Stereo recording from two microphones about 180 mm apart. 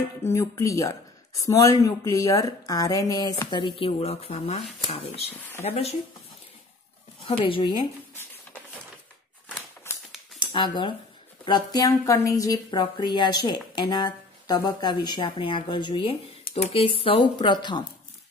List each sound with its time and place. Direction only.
0.2 s a woman's voice: 15° left (ahead or behind); by 5.9 s 35° left (ahead or behind)
7.2 s a woman's voice: 30° left (ahead or behind)
9.9 s music: 15° left (ahead or behind)
10.5 s a woman's voice: 25° left (ahead or behind)